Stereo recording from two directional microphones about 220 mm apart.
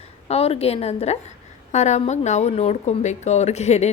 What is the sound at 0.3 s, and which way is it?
A woman's voice, 25° left (ahead or behind).